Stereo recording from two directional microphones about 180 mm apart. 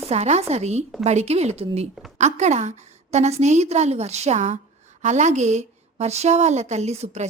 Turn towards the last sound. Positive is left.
turn(degrees=-40)  # may be behind; listen again after turning